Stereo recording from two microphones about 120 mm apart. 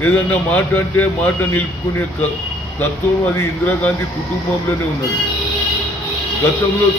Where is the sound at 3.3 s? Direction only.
15° left (ahead or behind).